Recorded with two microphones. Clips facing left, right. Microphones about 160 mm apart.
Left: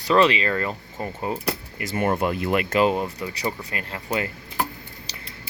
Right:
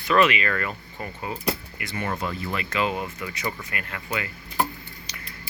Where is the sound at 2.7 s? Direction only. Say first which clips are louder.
Left 4 dB; 40° left (ahead or behind).